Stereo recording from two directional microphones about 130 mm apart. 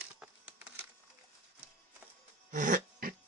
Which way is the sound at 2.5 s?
85° right.